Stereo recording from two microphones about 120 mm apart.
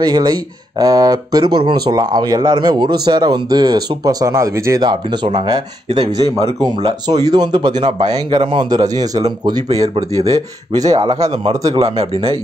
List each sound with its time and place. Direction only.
0.0 s speech: 35° right (ahead or behind)
1.4 s speech: 45° right (ahead or behind); by 4.8 s 25° right (ahead or behind)
4.8 s speech: 40° right (ahead or behind)
11.7 s speech: 55° right (ahead or behind)